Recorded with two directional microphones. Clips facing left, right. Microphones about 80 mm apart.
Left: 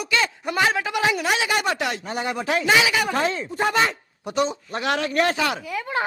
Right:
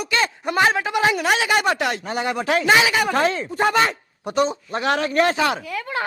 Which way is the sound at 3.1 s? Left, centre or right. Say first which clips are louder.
Right 3 dB; right.